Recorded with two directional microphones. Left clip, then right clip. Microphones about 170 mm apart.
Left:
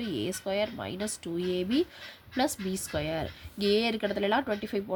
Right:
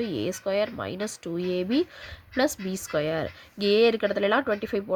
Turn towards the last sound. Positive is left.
turn(degrees=-40)  # may be behind; listen again after turning